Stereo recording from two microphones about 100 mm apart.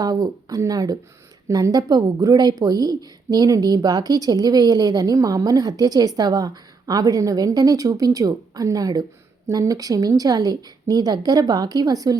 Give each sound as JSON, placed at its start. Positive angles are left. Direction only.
{"t": 0.0, "sound": "speech", "side_deg": -40}